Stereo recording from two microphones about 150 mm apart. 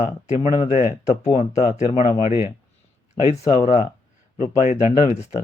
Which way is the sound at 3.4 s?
25° left (ahead or behind).